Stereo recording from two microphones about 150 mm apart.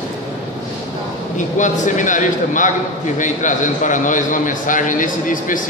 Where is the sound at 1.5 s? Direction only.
55° left (ahead or behind).